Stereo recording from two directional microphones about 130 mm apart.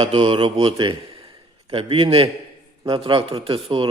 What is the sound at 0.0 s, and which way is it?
Speech, 45° right (ahead or behind).